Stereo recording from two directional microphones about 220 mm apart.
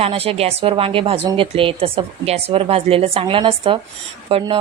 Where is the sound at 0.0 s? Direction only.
25° right (ahead or behind).